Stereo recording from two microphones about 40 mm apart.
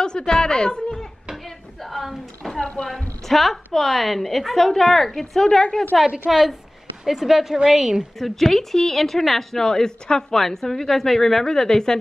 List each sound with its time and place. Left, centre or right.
0.2 s a woman's voice: centre
1.3 s a sound: centre
2.8 s a woman's voice: centre
6.0 s a woman's voice: centre
7.1 s a woman's voice: centre
8.2 s a woman's voice: centre